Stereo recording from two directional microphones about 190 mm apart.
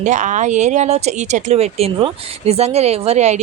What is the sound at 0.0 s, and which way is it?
Speech, 40° right (ahead or behind).